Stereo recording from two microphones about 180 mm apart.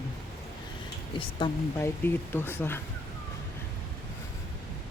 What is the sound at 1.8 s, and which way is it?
Speech, 10° left (ahead or behind).